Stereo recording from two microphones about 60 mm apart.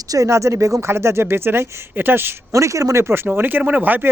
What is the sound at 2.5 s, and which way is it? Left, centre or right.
Speech, right.